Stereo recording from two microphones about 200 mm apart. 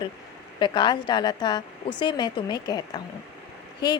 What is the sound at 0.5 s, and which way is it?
Speech, 25° left (ahead or behind).